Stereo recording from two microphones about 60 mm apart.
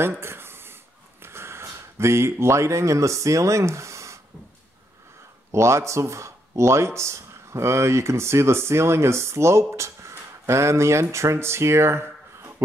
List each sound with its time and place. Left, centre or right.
0.0 s a sound: right
1.2 s speech: right
5.5 s speech: right